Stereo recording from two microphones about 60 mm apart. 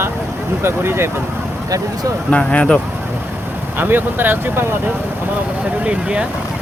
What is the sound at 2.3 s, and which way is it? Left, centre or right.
Speech, centre.